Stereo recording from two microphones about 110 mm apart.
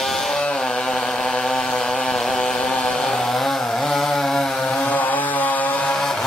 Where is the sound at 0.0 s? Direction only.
5° left (ahead or behind).